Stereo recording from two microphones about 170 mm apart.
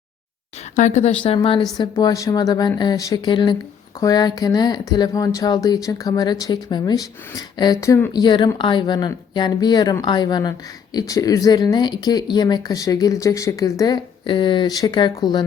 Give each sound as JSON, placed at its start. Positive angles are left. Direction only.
{"t": 0.8, "sound": "speech", "side_deg": 45}